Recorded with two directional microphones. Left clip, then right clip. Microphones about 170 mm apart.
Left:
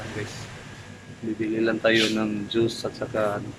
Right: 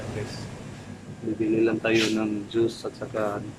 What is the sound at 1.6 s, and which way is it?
Speech, 5° right (ahead or behind).